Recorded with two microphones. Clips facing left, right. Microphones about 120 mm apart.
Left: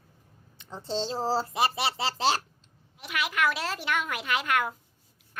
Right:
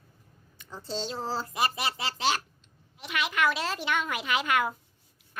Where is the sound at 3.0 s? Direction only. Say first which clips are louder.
Even; centre (ahead or behind).